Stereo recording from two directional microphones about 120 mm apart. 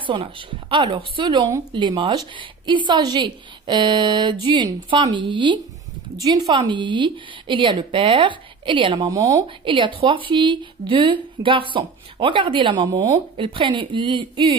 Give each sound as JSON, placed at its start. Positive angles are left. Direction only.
{"t": 0.0, "sound": "a woman's voice", "side_deg": -45}
{"t": 9.1, "sound": "speech", "side_deg": -30}
{"t": 9.7, "sound": "speech", "side_deg": -45}